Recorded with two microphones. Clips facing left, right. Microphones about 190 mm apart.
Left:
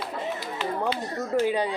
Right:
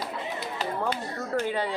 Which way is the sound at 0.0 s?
45° right (ahead or behind).